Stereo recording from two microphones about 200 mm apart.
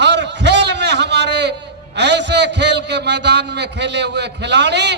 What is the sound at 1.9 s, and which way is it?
A man's voice, 60° right (ahead or behind).